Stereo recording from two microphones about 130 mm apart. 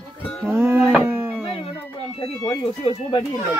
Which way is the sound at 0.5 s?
20° right (ahead or behind).